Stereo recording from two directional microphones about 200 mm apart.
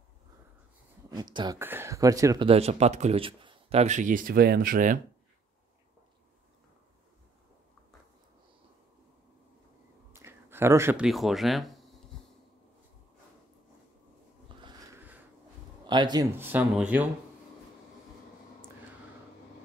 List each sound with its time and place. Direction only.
1.1 s speech: 20° right (ahead or behind); by 5.0 s 40° right (ahead or behind)
10.1 s speech: 10° right (ahead or behind)
14.6 s a sound: 20° right (ahead or behind)
15.9 s speech: 20° right (ahead or behind)